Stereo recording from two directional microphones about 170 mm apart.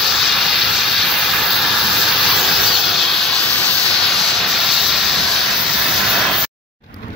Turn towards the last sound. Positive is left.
turn(degrees=0)  # may be behind; listen again after turning